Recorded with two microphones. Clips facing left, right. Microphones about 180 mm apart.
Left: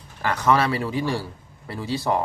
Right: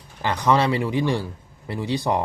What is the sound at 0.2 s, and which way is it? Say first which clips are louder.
Speech: right 1 dB; 20° right (ahead or behind).